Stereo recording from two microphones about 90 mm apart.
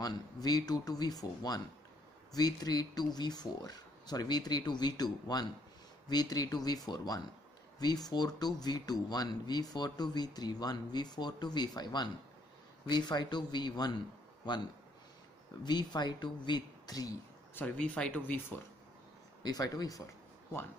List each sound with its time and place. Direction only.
0.0 s speech: 45° left (ahead or behind)
15.6 s speech: 50° left (ahead or behind)
17.6 s speech: 15° left (ahead or behind)
19.4 s speech: 45° left (ahead or behind)